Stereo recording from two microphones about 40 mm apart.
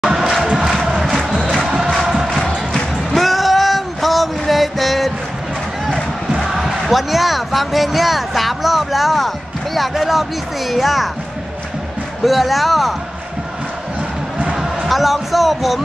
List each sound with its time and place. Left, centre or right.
0.0 s cheering: centre
2.2 s music: centre
3.1 s music: centre
6.5 s a man's voice: centre
12.3 s speech: centre
14.5 s a sound: centre
14.9 s speech: centre